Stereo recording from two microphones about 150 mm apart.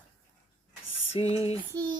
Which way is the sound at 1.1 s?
40° left (ahead or behind).